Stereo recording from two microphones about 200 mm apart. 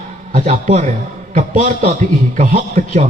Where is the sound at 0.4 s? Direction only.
35° right (ahead or behind).